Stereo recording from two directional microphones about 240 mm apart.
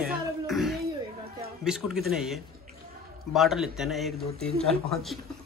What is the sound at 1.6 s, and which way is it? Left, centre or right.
Speech, centre.